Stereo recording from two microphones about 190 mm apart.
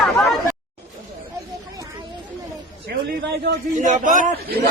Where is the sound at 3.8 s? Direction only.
45° right (ahead or behind).